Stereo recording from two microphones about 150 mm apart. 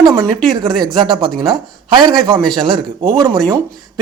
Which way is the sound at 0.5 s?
30° right (ahead or behind).